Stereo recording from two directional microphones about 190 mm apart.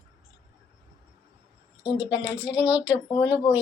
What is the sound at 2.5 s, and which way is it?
Speech, 10° right (ahead or behind).